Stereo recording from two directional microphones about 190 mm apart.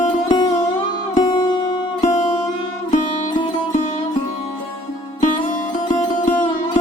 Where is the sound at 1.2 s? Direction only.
25° left (ahead or behind).